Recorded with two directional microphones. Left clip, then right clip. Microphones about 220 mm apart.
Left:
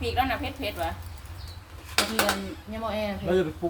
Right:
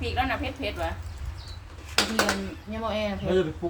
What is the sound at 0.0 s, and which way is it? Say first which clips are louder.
Speech: left 1 dB; 20° left (ahead or behind).